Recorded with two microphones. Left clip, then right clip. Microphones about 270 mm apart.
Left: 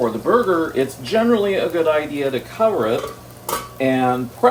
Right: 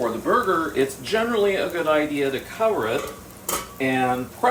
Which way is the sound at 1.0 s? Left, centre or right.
Left.